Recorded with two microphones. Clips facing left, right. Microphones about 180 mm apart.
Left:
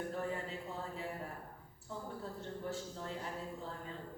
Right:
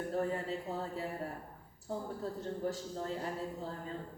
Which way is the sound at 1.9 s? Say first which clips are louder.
Right 5 dB; 35° right (ahead or behind).